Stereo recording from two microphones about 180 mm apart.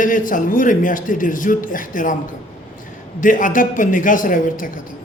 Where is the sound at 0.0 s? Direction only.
50° left (ahead or behind).